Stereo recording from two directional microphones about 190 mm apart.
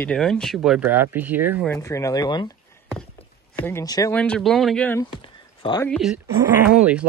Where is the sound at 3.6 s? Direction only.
15° left (ahead or behind).